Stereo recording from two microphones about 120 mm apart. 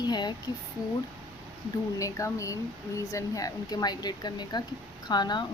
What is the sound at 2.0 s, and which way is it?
A woman's voice, 25° left (ahead or behind).